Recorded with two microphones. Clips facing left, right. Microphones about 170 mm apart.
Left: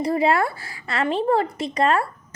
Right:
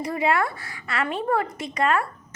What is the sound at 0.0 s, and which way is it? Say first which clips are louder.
A woman's voice: left 4 dB; 35° left (ahead or behind).